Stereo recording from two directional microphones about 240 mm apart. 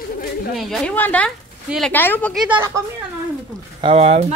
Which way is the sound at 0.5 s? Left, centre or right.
Centre.